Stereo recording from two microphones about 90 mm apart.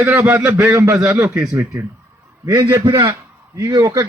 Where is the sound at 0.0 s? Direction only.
20° right (ahead or behind).